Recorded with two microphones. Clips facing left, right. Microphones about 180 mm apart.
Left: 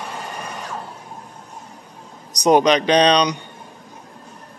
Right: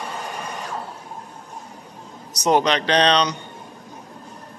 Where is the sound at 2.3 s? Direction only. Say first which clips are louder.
Left 4 dB; 15° left (ahead or behind).